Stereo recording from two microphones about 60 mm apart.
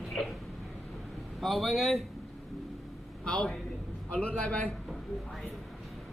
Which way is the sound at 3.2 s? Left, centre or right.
Centre.